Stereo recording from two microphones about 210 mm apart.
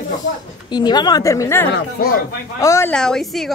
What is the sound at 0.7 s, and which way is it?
A woman's voice, 20° left (ahead or behind).